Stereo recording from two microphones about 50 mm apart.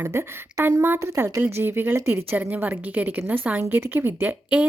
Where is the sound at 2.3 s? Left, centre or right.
Right.